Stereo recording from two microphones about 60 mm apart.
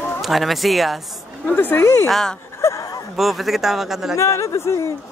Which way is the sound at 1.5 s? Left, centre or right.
Left.